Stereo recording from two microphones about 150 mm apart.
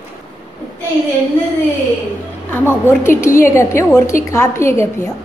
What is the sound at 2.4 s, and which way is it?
A woman's voice, 15° left (ahead or behind).